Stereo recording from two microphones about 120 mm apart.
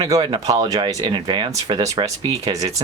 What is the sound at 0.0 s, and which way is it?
Speech, 35° right (ahead or behind).